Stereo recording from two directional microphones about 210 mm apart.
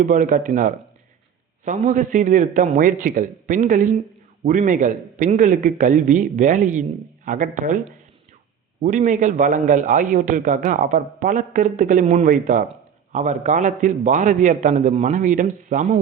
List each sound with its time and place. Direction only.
0.0 s a man's voice: 40° right (ahead or behind)
8.8 s a man's voice: 35° right (ahead or behind)